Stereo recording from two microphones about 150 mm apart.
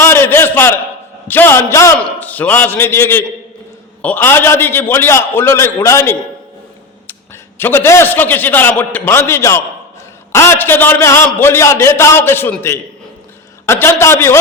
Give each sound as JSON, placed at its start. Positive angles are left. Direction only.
{"t": 0.0, "sound": "a sound", "side_deg": 15}
{"t": 1.3, "sound": "a man's voice", "side_deg": 15}
{"t": 7.6, "sound": "a man's voice", "side_deg": 15}